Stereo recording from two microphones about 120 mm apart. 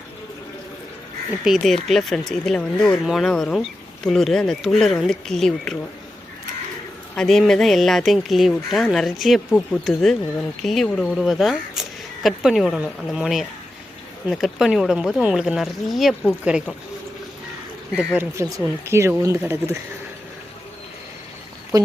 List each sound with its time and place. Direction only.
1.5 s speech: centre (ahead or behind)
7.2 s speech: centre (ahead or behind)
17.9 s speech: 15° right (ahead or behind)
18.3 s speech: 25° right (ahead or behind)
21.7 s speech: 30° right (ahead or behind)